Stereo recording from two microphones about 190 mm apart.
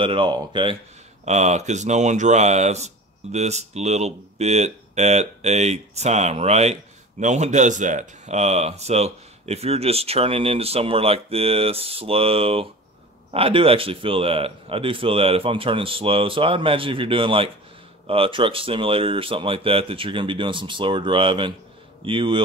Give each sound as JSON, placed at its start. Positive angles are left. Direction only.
{"t": 0.0, "sound": "speech", "side_deg": -25}
{"t": 1.2, "sound": "speech", "side_deg": -35}